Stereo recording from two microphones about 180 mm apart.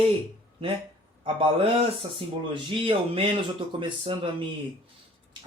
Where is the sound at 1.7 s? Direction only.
30° right (ahead or behind).